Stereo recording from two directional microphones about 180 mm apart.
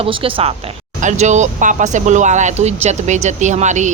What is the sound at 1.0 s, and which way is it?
A woman's voice, 40° right (ahead or behind).